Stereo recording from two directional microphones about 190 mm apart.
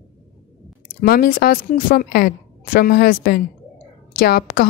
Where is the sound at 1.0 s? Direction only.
50° left (ahead or behind).